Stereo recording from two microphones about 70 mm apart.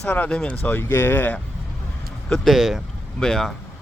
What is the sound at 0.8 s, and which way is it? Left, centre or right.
Speech, left.